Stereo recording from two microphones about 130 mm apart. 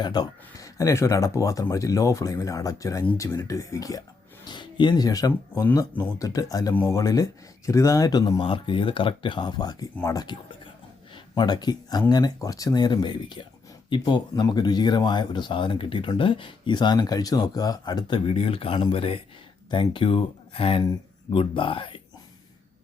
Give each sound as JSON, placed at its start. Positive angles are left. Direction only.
{"t": 0.0, "sound": "speech", "side_deg": 30}
{"t": 8.4, "sound": "speech", "side_deg": 40}